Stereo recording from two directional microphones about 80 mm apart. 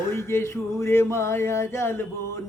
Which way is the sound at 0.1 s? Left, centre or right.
Left.